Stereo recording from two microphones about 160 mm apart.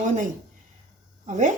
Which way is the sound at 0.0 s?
50° right (ahead or behind).